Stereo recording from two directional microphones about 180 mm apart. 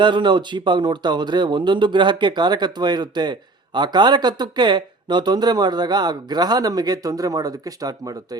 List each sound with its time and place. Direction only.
0.0 s speech: 25° right (ahead or behind)